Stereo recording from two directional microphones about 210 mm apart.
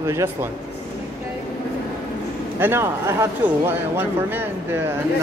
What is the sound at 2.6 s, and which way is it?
Speech, 10° right (ahead or behind).